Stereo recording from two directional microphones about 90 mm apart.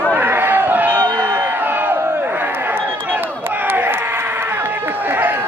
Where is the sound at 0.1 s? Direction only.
20° right (ahead or behind).